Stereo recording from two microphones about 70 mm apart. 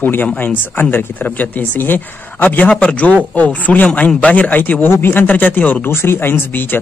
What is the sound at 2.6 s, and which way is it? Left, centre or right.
Speech, centre.